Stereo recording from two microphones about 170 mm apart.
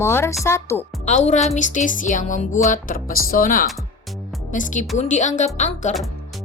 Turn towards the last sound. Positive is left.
turn(degrees=45)  # may be behind; listen again after turning